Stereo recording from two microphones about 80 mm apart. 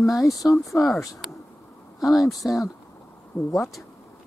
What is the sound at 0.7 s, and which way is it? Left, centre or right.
Speech, centre.